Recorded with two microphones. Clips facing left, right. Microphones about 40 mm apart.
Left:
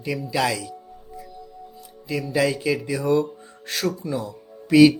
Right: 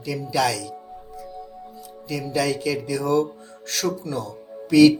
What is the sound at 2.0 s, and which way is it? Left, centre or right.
Speech, left.